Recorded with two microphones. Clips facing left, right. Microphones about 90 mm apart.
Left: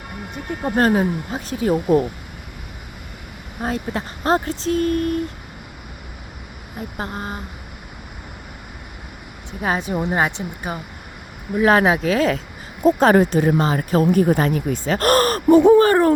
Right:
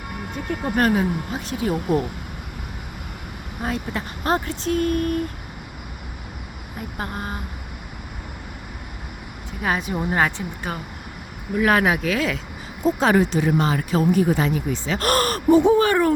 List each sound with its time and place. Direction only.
0.8 s speech: 35° left (ahead or behind)
3.6 s speech: 35° left (ahead or behind)
7.0 s speech: 25° left (ahead or behind)
9.5 s speech: 25° left (ahead or behind)
12.8 s speech: 45° left (ahead or behind)
14.0 s speech: 50° left (ahead or behind)
15.4 s speech: 55° left (ahead or behind)
15.8 s speech: 40° left (ahead or behind)